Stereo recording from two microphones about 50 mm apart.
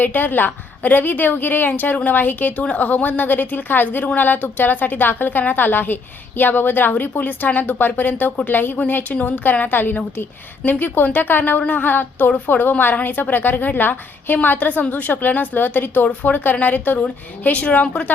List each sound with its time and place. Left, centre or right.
0.0 s a woman's voice: left